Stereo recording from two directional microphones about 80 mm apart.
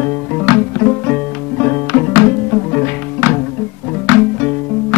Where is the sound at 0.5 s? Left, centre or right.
Centre.